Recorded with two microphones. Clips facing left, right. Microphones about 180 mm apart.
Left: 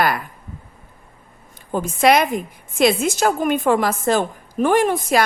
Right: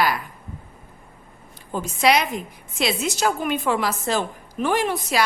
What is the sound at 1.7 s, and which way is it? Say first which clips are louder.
A woman's voice: left 4 dB; 50° left (ahead or behind).